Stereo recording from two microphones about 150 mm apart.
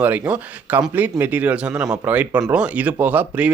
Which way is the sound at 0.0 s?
10° right (ahead or behind).